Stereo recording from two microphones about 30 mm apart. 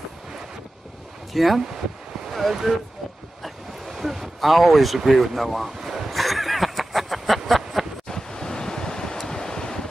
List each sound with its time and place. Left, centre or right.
1.3 s speech: centre
2.7 s speech: centre
3.4 s a sound: centre
8.1 s waves: left